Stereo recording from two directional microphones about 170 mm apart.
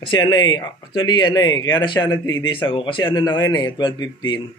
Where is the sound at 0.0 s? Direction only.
25° left (ahead or behind).